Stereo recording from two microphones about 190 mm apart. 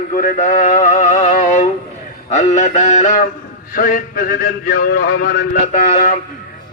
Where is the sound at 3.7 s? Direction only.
50° left (ahead or behind).